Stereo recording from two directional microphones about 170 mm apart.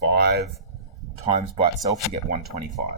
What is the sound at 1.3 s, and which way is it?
Speech, 35° right (ahead or behind).